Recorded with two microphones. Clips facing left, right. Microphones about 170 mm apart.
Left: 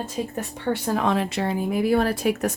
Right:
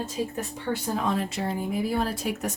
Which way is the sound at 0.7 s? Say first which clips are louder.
Left 4 dB; 70° left (ahead or behind).